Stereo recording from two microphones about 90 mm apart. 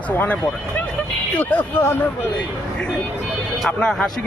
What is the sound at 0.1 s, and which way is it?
Speech, 25° left (ahead or behind).